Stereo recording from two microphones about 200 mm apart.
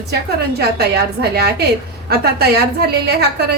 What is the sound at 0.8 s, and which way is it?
A woman's voice, 55° right (ahead or behind).